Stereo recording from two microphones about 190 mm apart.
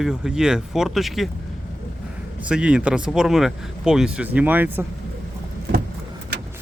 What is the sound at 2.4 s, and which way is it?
Speech, 5° right (ahead or behind).